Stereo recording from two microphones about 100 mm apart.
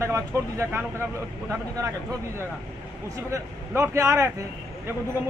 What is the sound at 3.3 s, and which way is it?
Speech, 30° right (ahead or behind).